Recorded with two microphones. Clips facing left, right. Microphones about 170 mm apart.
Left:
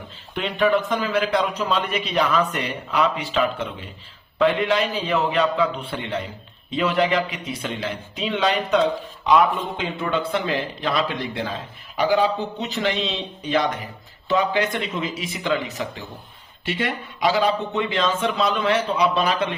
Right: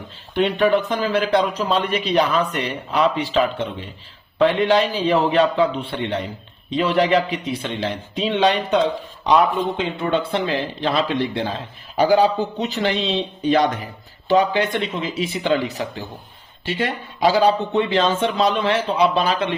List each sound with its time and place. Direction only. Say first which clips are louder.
0.3 s a man's voice: right 3 dB; 35° right (ahead or behind)